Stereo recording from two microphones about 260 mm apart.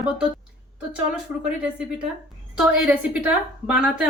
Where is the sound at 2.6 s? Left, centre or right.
Centre.